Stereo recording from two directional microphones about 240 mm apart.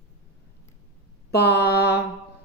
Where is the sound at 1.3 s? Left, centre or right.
Left.